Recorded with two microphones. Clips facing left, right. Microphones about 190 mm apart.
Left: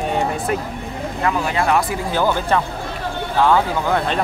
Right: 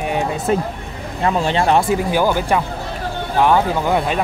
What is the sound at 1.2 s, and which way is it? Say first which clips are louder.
Speech: right 3 dB; 30° right (ahead or behind).